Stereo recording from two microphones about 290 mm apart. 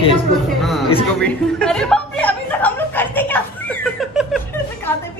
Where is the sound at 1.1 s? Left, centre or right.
Centre.